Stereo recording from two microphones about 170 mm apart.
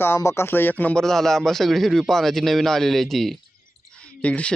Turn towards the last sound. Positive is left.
turn(degrees=5)  # may be behind; listen again after turning